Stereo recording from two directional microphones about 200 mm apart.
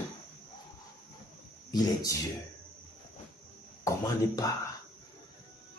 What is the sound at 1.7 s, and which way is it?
Speech, 15° left (ahead or behind).